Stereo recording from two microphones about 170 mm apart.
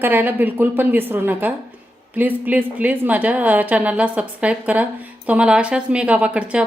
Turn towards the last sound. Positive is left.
turn(degrees=-5)  # may be behind; listen again after turning